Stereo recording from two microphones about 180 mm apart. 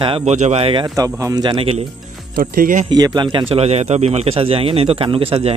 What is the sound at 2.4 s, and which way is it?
Speech, 50° right (ahead or behind).